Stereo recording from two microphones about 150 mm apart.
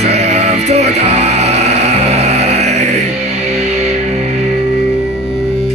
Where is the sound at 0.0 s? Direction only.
45° right (ahead or behind).